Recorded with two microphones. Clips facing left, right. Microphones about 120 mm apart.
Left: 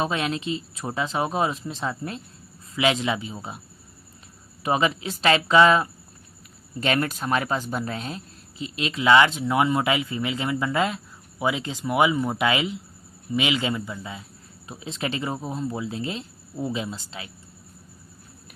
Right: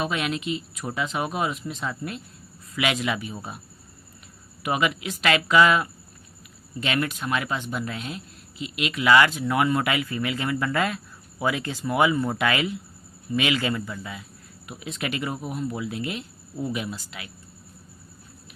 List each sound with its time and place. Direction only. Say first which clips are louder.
0.0 s speech: left 1 dB; 35° left (ahead or behind)
4.6 s speech: left 2 dB; 30° left (ahead or behind)